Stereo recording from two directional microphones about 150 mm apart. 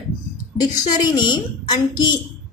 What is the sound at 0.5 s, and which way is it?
A woman's voice, 25° left (ahead or behind).